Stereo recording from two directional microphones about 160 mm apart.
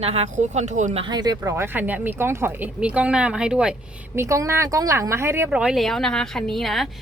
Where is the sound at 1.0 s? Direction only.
25° right (ahead or behind).